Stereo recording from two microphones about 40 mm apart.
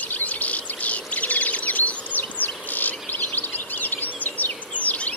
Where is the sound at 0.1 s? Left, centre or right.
Left.